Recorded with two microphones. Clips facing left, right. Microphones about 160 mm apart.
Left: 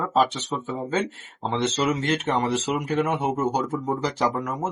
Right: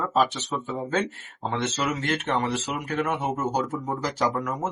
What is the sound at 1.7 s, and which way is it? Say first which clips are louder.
Speech: left 3 dB; 25° left (ahead or behind).